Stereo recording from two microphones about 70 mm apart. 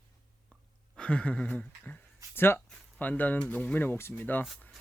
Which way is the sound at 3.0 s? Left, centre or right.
Left.